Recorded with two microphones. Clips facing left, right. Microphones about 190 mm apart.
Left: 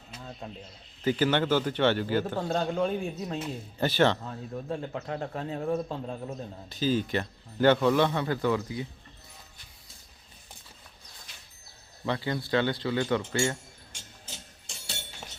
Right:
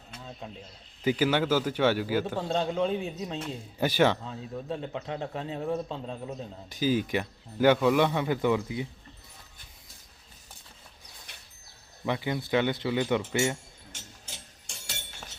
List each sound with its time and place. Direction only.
1.0 s a man's voice: 10° right (ahead or behind); by 3.5 s 5° left (ahead or behind)
3.8 s speech: 10° right (ahead or behind)
4.2 s a man's voice: 5° left (ahead or behind)
6.7 s speech: 15° right (ahead or behind)
11.3 s a sound: 60° right (ahead or behind)
12.0 s speech: 15° right (ahead or behind)